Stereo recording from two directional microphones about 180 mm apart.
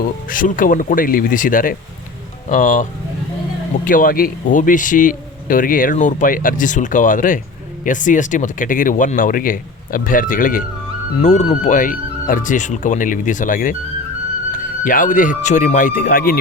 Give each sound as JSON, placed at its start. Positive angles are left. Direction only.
{"t": 0.3, "sound": "speech", "side_deg": 50}
{"t": 3.8, "sound": "speech", "side_deg": 50}